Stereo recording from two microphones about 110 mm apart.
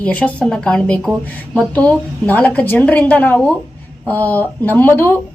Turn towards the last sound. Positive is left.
turn(degrees=20)  # may be behind; listen again after turning